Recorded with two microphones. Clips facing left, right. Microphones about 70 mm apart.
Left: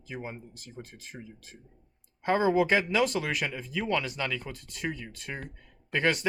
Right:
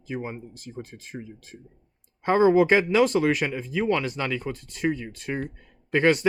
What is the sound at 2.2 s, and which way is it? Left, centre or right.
Speech, right.